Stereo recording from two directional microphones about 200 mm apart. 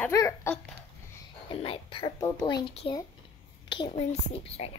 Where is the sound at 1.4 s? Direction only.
25° left (ahead or behind).